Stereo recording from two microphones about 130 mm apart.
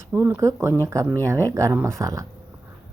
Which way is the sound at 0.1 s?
15° right (ahead or behind).